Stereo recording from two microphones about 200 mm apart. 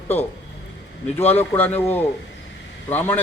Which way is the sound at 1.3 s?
10° left (ahead or behind).